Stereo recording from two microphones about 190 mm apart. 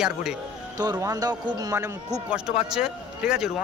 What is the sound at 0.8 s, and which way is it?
A man's voice, 20° right (ahead or behind).